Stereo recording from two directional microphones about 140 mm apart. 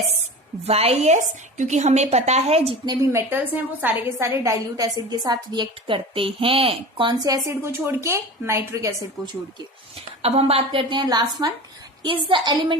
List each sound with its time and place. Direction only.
0.6 s a woman's voice: 45° right (ahead or behind)
2.8 s a woman's voice: 25° right (ahead or behind)
10.2 s a woman's voice: 50° right (ahead or behind)